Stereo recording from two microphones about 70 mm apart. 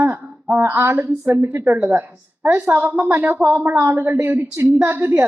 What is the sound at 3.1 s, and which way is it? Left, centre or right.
A woman's voice, right.